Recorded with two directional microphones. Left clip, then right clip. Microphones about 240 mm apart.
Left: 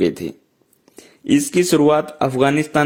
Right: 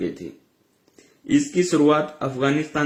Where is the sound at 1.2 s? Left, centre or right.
Left.